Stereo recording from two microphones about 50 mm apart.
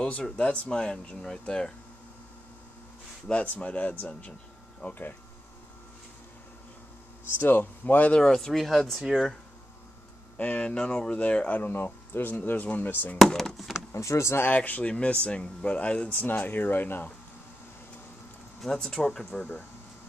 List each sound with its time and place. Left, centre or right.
0.0 s speech: left
3.3 s speech: left
7.3 s speech: left
8.2 s speech: centre
10.3 s speech: left
11.7 s speech: left
13.9 s speech: left
14.5 s speech: left
18.7 s speech: centre
19.3 s speech: left